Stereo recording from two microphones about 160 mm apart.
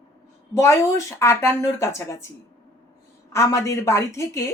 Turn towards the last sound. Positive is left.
turn(degrees=20)  # may be behind; listen again after turning